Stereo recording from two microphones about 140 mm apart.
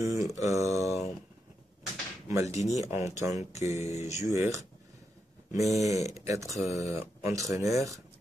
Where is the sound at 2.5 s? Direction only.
55° left (ahead or behind).